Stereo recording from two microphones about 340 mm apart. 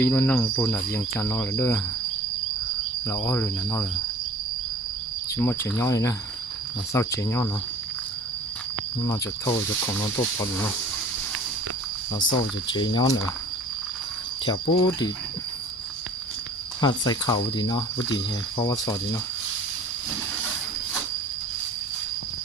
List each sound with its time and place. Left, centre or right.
0.0 s speech: centre
3.1 s speech: centre
5.4 s speech: centre
9.0 s speech: centre
12.2 s speech: left
12.7 s speech: centre
14.4 s speech: centre
16.8 s speech: centre